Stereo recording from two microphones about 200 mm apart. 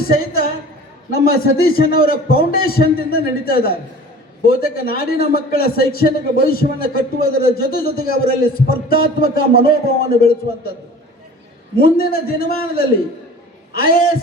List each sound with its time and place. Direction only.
0.1 s a woman's voice: 50° left (ahead or behind)
11.8 s a man's voice: 50° left (ahead or behind)
13.7 s a man's voice: 45° left (ahead or behind)